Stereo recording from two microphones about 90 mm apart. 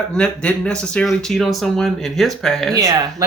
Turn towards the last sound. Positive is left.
turn(degrees=-40)  # may be behind; listen again after turning